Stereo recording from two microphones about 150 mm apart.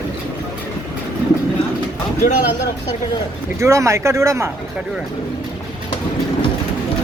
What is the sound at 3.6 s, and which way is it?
Speech, 20° right (ahead or behind).